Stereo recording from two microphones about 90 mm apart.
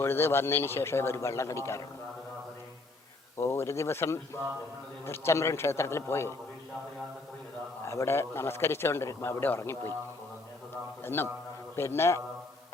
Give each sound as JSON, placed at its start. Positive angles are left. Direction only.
{"t": 0.0, "sound": "a man's voice", "side_deg": 25}
{"t": 3.3, "sound": "a man's voice", "side_deg": 30}
{"t": 7.9, "sound": "a man's voice", "side_deg": 30}
{"t": 11.0, "sound": "a man's voice", "side_deg": 25}